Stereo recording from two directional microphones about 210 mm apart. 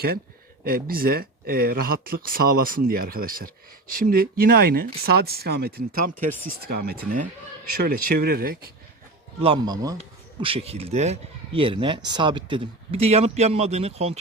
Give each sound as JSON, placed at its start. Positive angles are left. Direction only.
{"t": 0.6, "sound": "speech", "side_deg": -45}
{"t": 9.4, "sound": "speech", "side_deg": -20}